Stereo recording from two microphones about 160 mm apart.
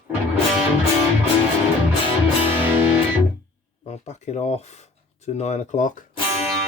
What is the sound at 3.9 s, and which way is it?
Speech, 45° left (ahead or behind).